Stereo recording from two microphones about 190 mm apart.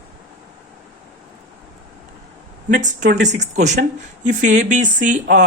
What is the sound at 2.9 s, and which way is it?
Speech, 40° right (ahead or behind).